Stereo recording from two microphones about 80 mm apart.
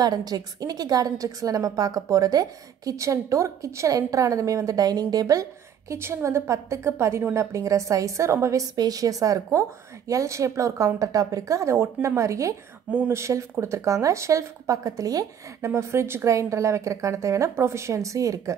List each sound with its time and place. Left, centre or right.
0.0 s a woman's voice: right
5.9 s speech: right
8.7 s speech: right
15.6 s speech: right